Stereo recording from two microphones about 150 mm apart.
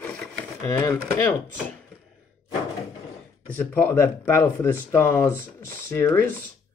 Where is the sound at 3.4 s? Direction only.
10° left (ahead or behind).